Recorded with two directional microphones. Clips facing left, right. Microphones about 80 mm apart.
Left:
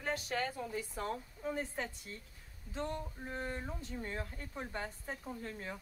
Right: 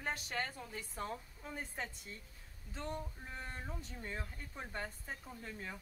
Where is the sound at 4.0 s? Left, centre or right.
Centre.